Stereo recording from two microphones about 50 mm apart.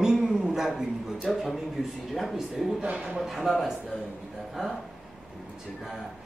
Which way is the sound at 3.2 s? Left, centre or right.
Centre.